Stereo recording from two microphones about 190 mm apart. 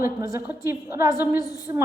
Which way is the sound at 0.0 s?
15° right (ahead or behind).